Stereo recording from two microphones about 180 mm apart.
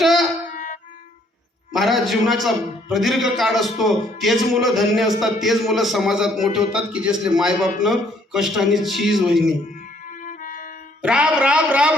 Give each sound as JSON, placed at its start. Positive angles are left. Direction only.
{"t": 0.0, "sound": "music", "side_deg": 0}
{"t": 0.5, "sound": "music", "side_deg": 45}
{"t": 1.7, "sound": "a man's voice", "side_deg": 0}
{"t": 10.1, "sound": "music", "side_deg": 45}
{"t": 11.0, "sound": "a man's voice", "side_deg": -5}